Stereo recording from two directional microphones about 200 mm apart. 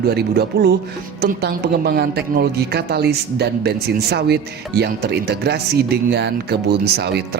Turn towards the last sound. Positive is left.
turn(degrees=-55)  # may be behind; listen again after turning